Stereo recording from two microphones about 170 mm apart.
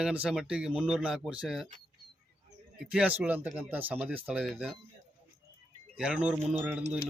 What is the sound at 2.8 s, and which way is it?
Speech, 5° right (ahead or behind).